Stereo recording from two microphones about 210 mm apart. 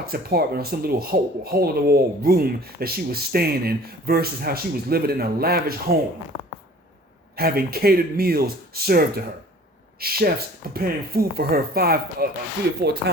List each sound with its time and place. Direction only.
0.0 s speech: 45° right (ahead or behind)
7.3 s speech: 45° right (ahead or behind)